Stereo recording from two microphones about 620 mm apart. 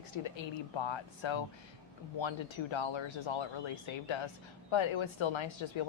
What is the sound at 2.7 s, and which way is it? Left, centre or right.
Speech, left.